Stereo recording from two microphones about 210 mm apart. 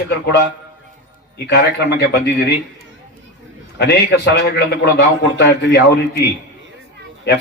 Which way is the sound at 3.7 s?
55° left (ahead or behind).